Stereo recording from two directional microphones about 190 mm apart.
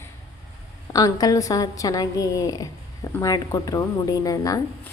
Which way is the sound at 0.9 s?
20° left (ahead or behind).